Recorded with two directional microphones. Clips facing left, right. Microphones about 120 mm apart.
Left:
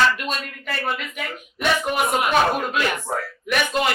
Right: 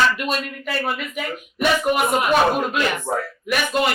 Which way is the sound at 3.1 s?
30° right (ahead or behind).